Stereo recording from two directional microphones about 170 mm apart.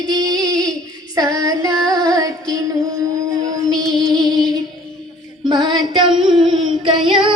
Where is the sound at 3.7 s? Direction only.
5° left (ahead or behind).